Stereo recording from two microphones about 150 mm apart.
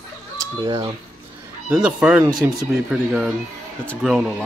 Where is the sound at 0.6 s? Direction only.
25° right (ahead or behind).